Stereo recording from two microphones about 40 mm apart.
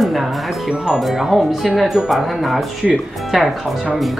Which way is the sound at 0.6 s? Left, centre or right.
Centre.